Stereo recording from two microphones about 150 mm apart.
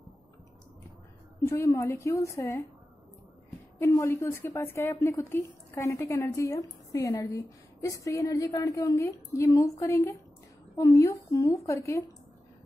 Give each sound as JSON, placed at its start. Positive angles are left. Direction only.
{"t": 1.4, "sound": "a woman's voice", "side_deg": 20}
{"t": 3.8, "sound": "a woman's voice", "side_deg": 15}